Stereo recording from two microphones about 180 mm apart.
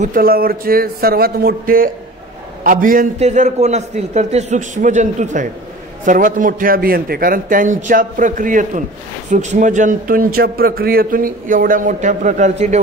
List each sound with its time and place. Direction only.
0.0 s a man's voice: 55° right (ahead or behind)